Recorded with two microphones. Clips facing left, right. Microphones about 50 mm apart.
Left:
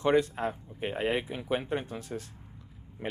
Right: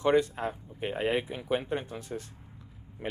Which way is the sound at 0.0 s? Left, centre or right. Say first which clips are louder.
Even; centre.